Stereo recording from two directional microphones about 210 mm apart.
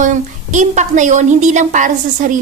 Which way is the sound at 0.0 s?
35° right (ahead or behind).